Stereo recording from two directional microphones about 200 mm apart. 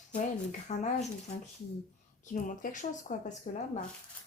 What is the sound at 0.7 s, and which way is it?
Speech, 35° left (ahead or behind).